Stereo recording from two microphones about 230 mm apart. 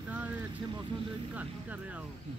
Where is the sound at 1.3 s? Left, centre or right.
Centre.